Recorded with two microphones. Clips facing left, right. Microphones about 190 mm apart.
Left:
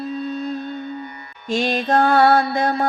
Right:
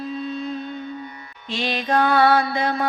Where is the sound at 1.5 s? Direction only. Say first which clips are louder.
Left 4 dB; 45° left (ahead or behind).